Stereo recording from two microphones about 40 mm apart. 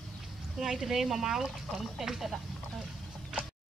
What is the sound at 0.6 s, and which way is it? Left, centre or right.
Speech, centre.